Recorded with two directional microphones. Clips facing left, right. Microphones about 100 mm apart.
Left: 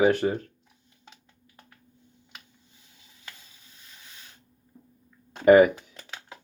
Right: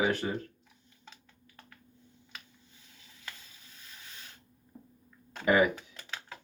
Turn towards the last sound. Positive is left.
turn(degrees=45)  # may be behind; listen again after turning